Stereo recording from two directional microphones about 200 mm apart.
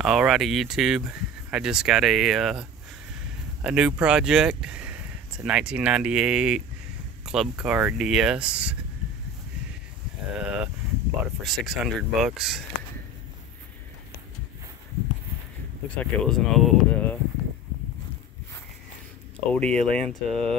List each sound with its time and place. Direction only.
0.0 s speech: centre (ahead or behind)
3.6 s speech: 5° right (ahead or behind)
10.3 s speech: 5° right (ahead or behind)
16.0 s speech: centre (ahead or behind)
19.5 s speech: 5° left (ahead or behind)